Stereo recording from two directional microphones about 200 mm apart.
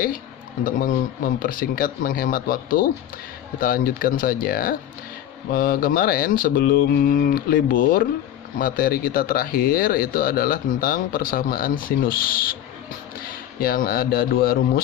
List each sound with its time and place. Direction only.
0.6 s speech: 45° left (ahead or behind)